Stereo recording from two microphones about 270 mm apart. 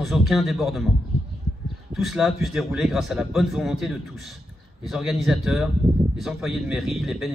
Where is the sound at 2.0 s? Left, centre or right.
Centre.